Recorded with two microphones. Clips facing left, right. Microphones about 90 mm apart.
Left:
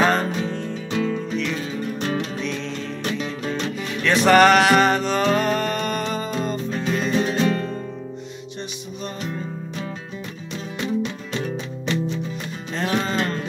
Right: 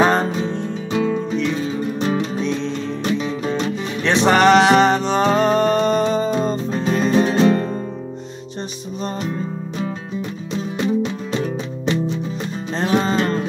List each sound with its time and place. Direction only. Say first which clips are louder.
0.0 s music: right 3 dB; 25° right (ahead or behind)
11.3 s music: right 3 dB; 30° right (ahead or behind)